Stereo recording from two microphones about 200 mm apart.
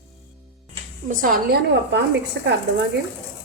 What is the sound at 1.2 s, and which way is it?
Speech, 45° right (ahead or behind).